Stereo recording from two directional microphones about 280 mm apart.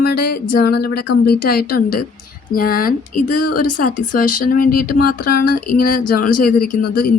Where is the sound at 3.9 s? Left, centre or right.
Left.